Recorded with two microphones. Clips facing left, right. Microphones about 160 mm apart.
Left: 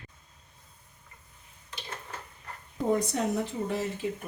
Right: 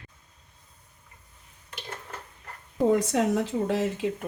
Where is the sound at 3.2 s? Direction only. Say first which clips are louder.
Right 5 dB; 90° right.